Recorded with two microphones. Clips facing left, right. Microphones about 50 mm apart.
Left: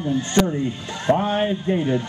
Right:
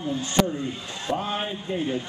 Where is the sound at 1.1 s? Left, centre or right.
Left.